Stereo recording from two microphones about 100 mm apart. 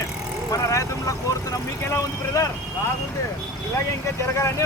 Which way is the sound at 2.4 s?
30° left (ahead or behind).